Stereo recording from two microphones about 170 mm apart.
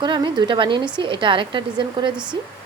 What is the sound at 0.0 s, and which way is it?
A woman's voice, 25° right (ahead or behind).